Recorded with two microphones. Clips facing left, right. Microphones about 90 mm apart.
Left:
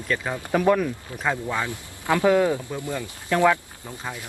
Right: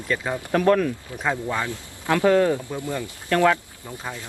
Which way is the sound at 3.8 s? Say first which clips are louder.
Right 1 dB; 20° right (ahead or behind).